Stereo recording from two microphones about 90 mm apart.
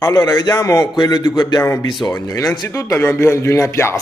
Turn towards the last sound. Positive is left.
turn(degrees=30)  # may be behind; listen again after turning